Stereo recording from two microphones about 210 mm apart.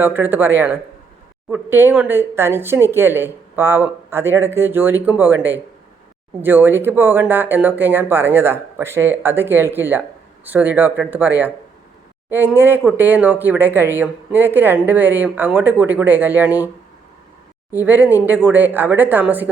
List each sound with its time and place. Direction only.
0.0 s speech: 10° right (ahead or behind)
17.7 s speech: 10° right (ahead or behind)